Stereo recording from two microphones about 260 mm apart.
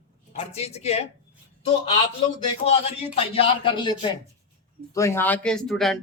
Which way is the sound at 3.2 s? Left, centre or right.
Left.